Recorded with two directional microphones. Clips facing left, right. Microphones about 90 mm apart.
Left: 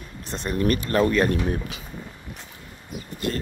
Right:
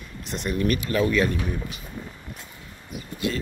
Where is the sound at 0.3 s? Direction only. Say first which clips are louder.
Left 1 dB; 35° left (ahead or behind).